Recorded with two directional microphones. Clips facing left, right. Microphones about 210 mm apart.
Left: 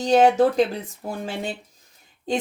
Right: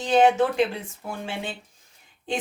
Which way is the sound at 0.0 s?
40° left (ahead or behind).